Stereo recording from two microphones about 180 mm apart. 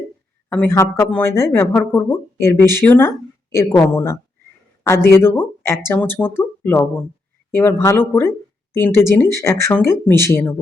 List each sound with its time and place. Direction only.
0.5 s speech: 15° left (ahead or behind)